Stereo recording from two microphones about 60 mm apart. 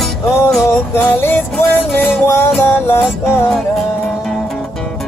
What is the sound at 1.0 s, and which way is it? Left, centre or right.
Music, left.